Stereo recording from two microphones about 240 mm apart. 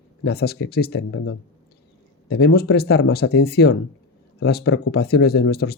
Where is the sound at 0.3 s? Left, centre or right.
Left.